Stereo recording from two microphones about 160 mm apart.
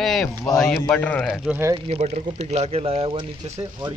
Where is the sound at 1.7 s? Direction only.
40° right (ahead or behind).